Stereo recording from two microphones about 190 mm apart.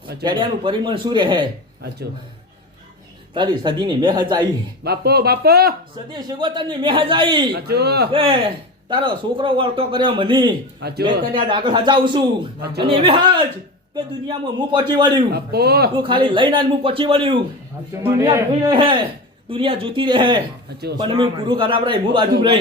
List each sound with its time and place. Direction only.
0.2 s a man's voice: 25° right (ahead or behind)
3.3 s a man's voice: 25° right (ahead or behind)
4.8 s speech: 55° right (ahead or behind)
6.1 s a man's voice: 20° right (ahead or behind)
7.5 s speech: 60° right (ahead or behind)
8.1 s a man's voice: 30° right (ahead or behind)
10.8 s speech: 55° right (ahead or behind)
11.3 s a man's voice: 25° right (ahead or behind)
15.3 s speech: 55° right (ahead or behind)
16.0 s a man's voice: 25° right (ahead or behind)